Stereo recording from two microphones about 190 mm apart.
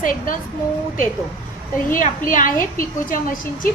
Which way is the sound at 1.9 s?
45° left (ahead or behind).